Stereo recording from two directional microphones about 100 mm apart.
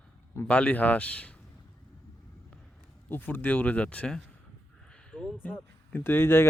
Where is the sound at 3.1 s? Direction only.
20° left (ahead or behind).